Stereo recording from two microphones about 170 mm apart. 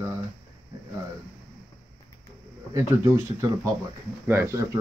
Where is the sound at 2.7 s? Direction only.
20° right (ahead or behind).